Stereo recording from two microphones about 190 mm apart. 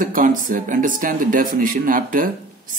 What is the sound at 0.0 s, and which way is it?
Speech, 45° right (ahead or behind).